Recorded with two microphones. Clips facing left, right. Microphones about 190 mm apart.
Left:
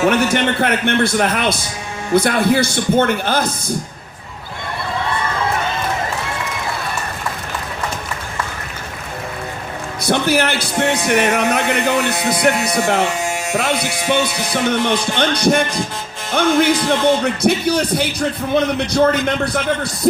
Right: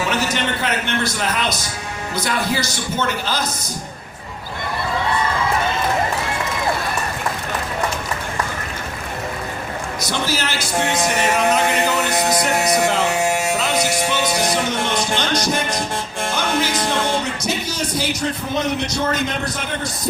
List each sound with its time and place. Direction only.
0.0 s speech: 55° left (ahead or behind)
10.1 s speech: 60° left (ahead or behind)
14.1 s speech: 60° left (ahead or behind)
16.3 s music: 60° left (ahead or behind)
17.4 s speech: 60° left (ahead or behind)